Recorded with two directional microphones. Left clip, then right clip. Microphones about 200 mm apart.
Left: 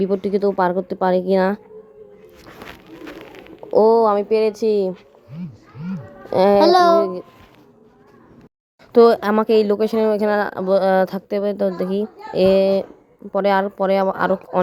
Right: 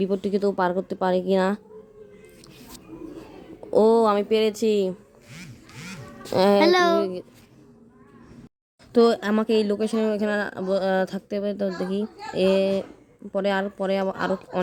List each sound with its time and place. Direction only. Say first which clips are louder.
0.0 s speech: left 5 dB; 5° left (ahead or behind)
3.8 s speech: left 4 dB; 5° right (ahead or behind)
6.3 s speech: left 5 dB; 5° right (ahead or behind)
6.7 s a child's voice: left 6 dB; 40° right (ahead or behind)
8.9 s speech: left 7 dB; 5° left (ahead or behind)